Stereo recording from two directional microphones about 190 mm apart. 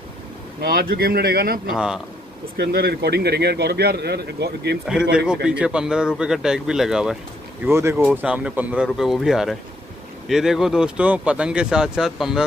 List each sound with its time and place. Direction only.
0.6 s speech: 50° right (ahead or behind)
1.7 s speech: 5° right (ahead or behind)
2.5 s a man's voice: 60° right (ahead or behind)
5.1 s speech: 5° right (ahead or behind)